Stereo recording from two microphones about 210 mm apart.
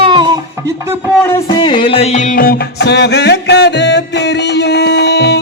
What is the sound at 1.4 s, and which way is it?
Music, 25° left (ahead or behind).